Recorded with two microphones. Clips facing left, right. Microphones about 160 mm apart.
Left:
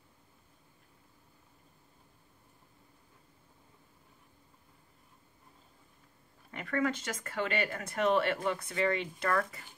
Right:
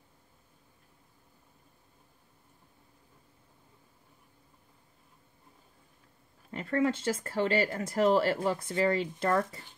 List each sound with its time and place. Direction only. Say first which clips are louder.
6.5 s speech: right 4 dB; 30° right (ahead or behind)